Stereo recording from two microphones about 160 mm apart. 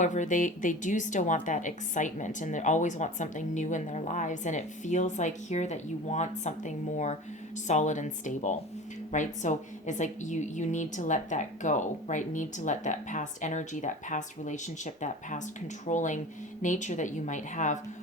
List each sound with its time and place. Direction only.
0.0 s a woman's voice: 50° left (ahead or behind)